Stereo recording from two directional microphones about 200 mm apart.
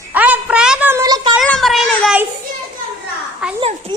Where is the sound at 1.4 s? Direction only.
5° left (ahead or behind).